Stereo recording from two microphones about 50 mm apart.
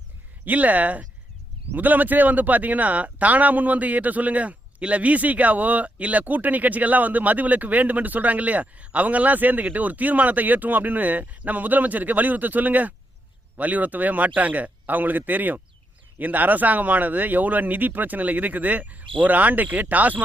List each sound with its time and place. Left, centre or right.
0.4 s speech: right